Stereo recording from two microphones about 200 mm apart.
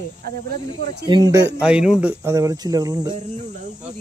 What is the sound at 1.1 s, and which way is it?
Speech, 20° right (ahead or behind).